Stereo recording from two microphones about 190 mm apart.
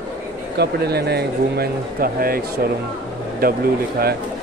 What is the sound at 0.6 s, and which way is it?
Speech, 60° right (ahead or behind).